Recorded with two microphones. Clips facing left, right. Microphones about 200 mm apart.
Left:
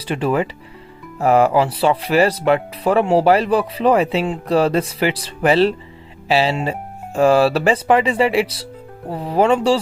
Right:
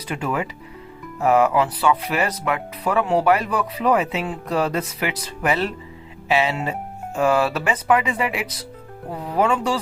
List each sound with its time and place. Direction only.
0.0 s speech: 30° left (ahead or behind)